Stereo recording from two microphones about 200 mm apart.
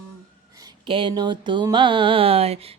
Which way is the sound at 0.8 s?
25° right (ahead or behind).